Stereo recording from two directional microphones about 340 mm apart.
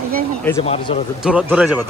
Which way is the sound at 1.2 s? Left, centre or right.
Centre.